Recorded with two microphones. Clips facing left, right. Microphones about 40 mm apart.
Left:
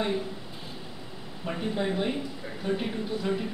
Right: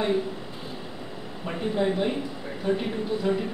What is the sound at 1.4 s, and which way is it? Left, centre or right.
Speech, centre.